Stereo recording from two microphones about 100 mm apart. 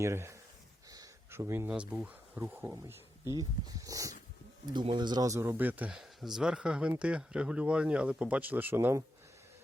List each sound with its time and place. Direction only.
0.0 s speech: 25° right (ahead or behind)
0.9 s a sound: 40° right (ahead or behind)
1.3 s speech: 25° right (ahead or behind)
4.6 s speech: 50° right (ahead or behind); by 5.9 s 15° right (ahead or behind)
5.9 s speech: 5° right (ahead or behind); by 9.0 s 25° right (ahead or behind)